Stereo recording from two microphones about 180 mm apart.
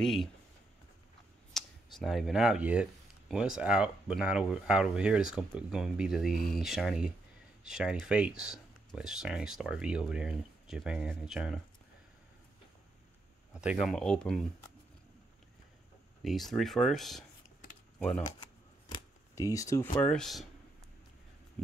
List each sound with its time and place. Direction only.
0.0 s speech: centre (ahead or behind)
1.5 s speech: centre (ahead or behind)
13.5 s speech: 5° right (ahead or behind)
16.3 s speech: centre (ahead or behind)
18.9 s speech: 20° left (ahead or behind); by 20.4 s centre (ahead or behind)